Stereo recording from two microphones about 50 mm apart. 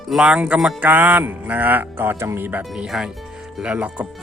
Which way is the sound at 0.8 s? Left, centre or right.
Right.